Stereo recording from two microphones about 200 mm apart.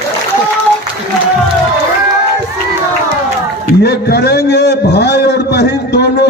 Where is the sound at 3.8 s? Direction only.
55° left (ahead or behind).